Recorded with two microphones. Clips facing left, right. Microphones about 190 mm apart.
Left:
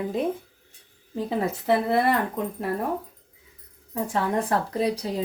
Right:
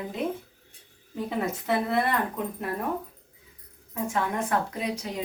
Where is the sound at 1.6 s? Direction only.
30° left (ahead or behind).